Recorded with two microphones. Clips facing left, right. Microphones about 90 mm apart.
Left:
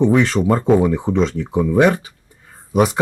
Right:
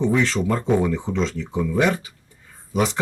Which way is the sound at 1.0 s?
50° left (ahead or behind).